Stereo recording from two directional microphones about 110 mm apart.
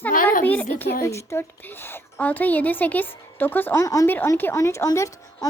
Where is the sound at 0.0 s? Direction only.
15° left (ahead or behind).